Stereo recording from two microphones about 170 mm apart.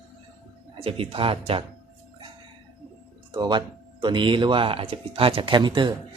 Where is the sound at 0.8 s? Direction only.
35° right (ahead or behind).